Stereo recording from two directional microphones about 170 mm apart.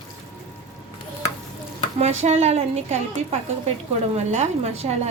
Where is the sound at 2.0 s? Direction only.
40° right (ahead or behind).